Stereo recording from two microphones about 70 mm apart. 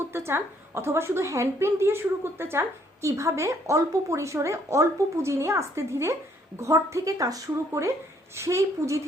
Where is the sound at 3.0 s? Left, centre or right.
Right.